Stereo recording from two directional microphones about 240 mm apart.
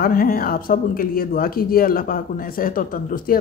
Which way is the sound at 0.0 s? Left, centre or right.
Left.